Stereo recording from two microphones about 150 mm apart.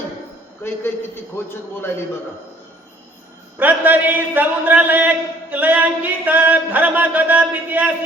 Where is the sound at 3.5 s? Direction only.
10° right (ahead or behind).